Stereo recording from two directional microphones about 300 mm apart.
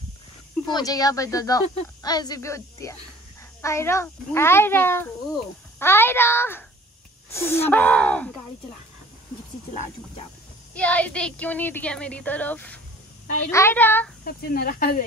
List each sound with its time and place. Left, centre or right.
0.7 s a child's voice: centre
10.7 s a child's voice: centre
14.2 s speech: left